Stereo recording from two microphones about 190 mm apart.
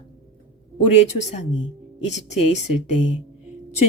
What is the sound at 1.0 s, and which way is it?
Speech, 35° left (ahead or behind).